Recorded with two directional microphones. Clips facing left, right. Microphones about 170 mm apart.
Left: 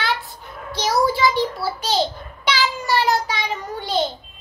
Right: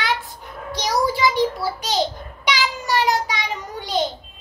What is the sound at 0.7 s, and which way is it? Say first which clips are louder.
Child singing: left 2 dB; 15° right (ahead or behind).